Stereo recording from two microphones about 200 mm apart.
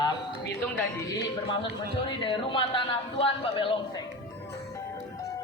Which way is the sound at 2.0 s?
25° left (ahead or behind).